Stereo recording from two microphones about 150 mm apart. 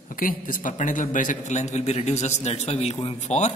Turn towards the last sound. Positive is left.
turn(degrees=50)  # may be behind; listen again after turning